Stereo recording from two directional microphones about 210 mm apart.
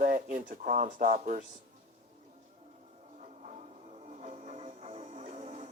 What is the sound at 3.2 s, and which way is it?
Music, 35° right (ahead or behind).